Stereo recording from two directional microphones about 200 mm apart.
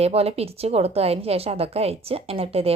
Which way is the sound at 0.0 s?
30° right (ahead or behind).